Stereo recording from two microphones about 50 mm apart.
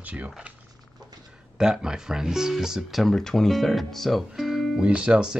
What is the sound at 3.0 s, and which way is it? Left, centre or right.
Speech, centre.